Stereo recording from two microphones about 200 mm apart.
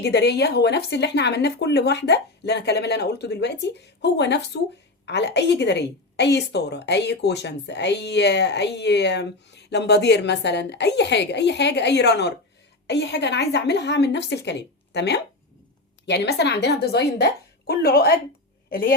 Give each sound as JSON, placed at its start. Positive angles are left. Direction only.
{"t": 0.0, "sound": "a woman's voice", "side_deg": 55}